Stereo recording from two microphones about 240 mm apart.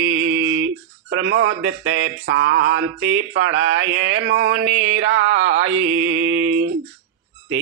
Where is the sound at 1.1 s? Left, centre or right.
Right.